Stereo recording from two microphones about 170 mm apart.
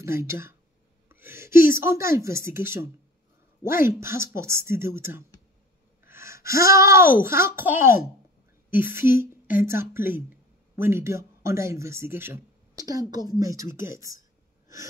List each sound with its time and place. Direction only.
0.0 s speech: 15° right (ahead or behind)
1.0 s a sound: 15° right (ahead or behind)
1.8 s speech: 15° right (ahead or behind)
6.0 s gasp: 15° right (ahead or behind)
6.5 s a sound: 60° left (ahead or behind)
6.8 s speech: 15° right (ahead or behind)